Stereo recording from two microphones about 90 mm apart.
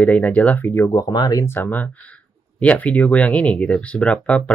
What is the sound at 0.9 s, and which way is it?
Speech, 50° left (ahead or behind).